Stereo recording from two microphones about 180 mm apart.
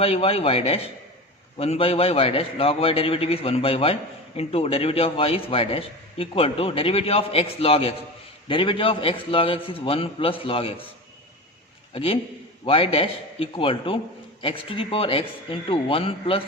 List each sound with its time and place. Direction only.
0.0 s a man's voice: 35° left (ahead or behind)
11.9 s a man's voice: 30° left (ahead or behind)